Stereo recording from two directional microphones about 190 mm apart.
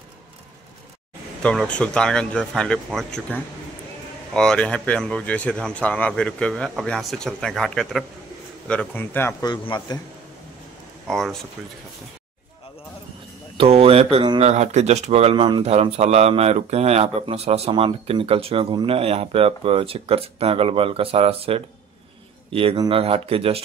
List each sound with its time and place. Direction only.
1.4 s a man's voice: 5° left (ahead or behind)
9.5 s a man's voice: 20° left (ahead or behind)
11.1 s a man's voice: centre (ahead or behind)
13.6 s a man's voice: 30° right (ahead or behind)